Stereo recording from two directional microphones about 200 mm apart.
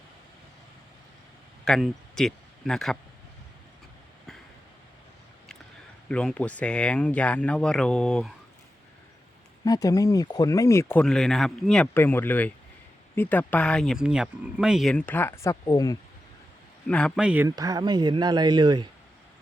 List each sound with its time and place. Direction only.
1.6 s speech: centre (ahead or behind)
6.1 s speech: 5° left (ahead or behind)
9.6 s speech: 20° left (ahead or behind)
16.8 s speech: 5° left (ahead or behind)
17.5 s speech: 20° right (ahead or behind)